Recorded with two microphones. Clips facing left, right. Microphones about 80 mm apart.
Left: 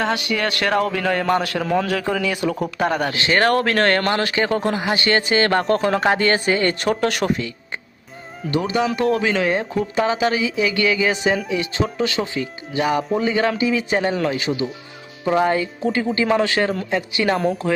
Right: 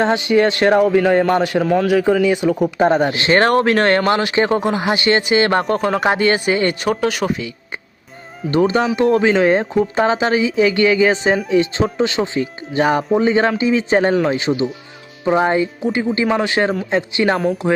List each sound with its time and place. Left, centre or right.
0.0 s speech: right
1.6 s speech: centre
1.9 s speech: centre
4.4 s speech: right
4.6 s speech: centre
4.9 s speech: right
6.8 s speech: centre
8.4 s speech: right
17.3 s speech: centre